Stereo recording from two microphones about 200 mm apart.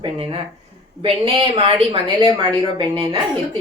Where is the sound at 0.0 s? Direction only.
25° right (ahead or behind).